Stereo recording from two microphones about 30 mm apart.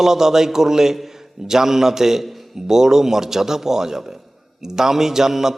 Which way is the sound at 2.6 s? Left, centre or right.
Centre.